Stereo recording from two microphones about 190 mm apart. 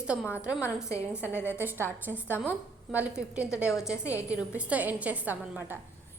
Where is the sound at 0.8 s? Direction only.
15° left (ahead or behind).